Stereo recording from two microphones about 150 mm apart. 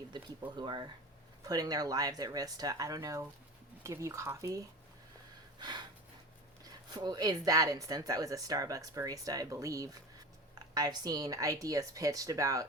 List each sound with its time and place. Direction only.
0.1 s speech: 30° right (ahead or behind)
5.5 s gasp: 30° right (ahead or behind)
6.9 s speech: 25° right (ahead or behind)